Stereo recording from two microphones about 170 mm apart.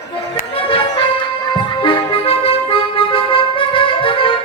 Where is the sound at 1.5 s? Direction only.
30° left (ahead or behind).